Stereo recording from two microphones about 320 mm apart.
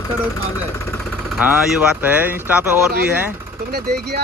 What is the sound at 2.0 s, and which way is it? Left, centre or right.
Speech, centre.